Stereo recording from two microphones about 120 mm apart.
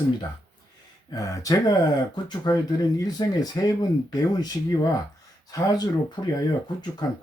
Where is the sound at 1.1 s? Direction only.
30° left (ahead or behind).